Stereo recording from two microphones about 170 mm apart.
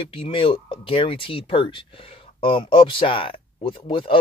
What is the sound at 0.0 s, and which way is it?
Speech, 30° left (ahead or behind).